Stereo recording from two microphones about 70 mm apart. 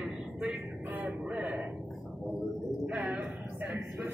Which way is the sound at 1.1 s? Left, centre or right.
Centre.